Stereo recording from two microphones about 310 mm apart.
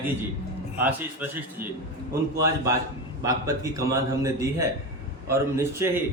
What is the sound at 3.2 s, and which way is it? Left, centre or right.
A man's voice, centre.